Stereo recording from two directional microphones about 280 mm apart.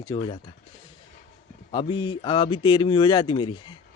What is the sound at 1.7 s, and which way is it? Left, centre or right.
A man's voice, centre.